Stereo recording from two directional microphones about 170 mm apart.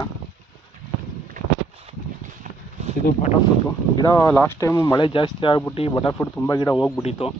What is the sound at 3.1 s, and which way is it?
Speech, 45° left (ahead or behind).